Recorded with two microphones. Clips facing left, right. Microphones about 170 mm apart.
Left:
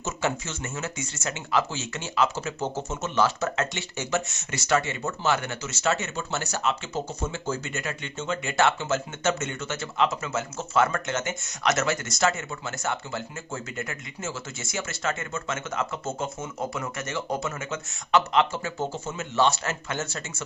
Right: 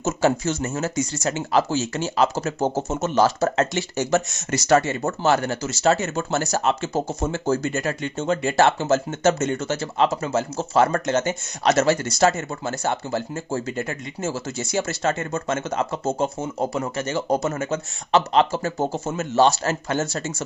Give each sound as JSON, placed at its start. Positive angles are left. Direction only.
{"t": 0.0, "sound": "speech", "side_deg": -35}